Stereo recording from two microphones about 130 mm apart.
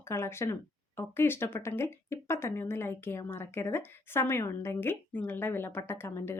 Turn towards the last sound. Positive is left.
turn(degrees=20)  # may be behind; listen again after turning